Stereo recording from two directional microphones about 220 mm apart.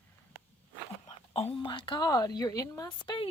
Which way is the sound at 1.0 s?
30° left (ahead or behind).